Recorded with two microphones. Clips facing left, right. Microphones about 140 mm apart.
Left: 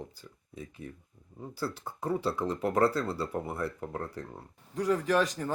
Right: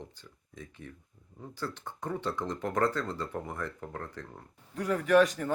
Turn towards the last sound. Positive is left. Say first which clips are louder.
# right 4 dB
turn(degrees=20)  # may be behind; listen again after turning